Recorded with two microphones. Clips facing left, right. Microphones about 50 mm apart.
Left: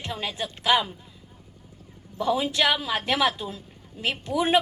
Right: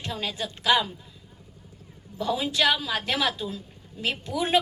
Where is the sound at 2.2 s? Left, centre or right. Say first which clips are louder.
Left 1 dB; centre.